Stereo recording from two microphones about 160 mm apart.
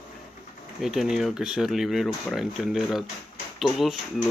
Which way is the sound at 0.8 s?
Centre (ahead or behind).